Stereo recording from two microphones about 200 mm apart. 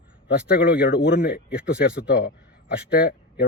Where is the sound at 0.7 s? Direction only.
50° left (ahead or behind).